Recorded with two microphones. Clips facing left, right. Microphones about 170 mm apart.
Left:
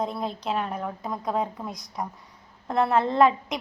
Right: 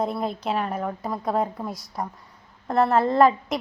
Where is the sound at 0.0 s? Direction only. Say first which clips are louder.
Right 3 dB; 5° right (ahead or behind).